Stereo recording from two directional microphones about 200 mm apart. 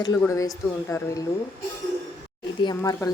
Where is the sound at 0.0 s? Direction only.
15° left (ahead or behind).